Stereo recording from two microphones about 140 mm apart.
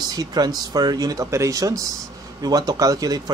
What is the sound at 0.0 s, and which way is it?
Speech, 30° right (ahead or behind).